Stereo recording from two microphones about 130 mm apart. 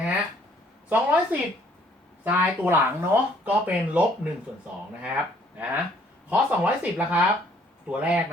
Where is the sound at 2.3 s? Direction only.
15° right (ahead or behind).